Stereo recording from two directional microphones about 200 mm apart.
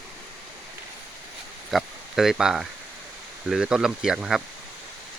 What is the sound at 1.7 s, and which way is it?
Speech, centre (ahead or behind).